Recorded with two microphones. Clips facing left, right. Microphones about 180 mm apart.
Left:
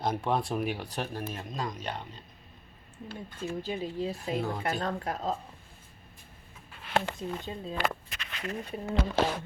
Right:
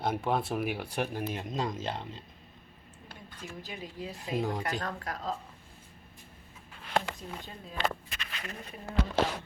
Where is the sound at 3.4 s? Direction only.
25° left (ahead or behind).